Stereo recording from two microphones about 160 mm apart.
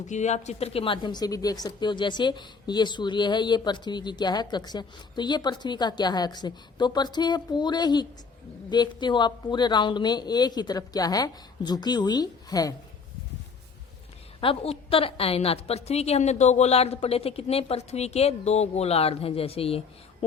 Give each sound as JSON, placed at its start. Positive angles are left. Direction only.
{"t": 0.0, "sound": "a woman's voice", "side_deg": 50}
{"t": 14.4, "sound": "a woman's voice", "side_deg": 35}